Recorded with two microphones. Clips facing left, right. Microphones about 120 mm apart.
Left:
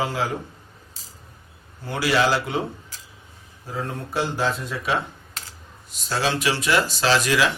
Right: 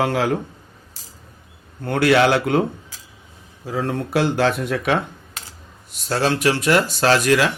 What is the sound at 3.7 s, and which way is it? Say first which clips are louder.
Speech: right 7 dB; 85° right.